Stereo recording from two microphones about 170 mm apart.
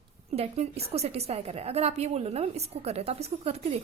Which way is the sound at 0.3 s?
40° right (ahead or behind).